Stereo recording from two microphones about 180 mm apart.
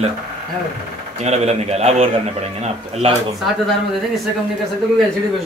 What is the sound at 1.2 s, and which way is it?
A man's voice, 35° right (ahead or behind).